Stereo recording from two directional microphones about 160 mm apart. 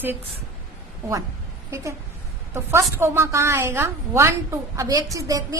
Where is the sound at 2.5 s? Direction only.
15° right (ahead or behind).